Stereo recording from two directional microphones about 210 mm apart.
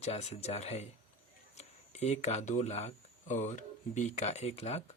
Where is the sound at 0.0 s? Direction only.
30° left (ahead or behind).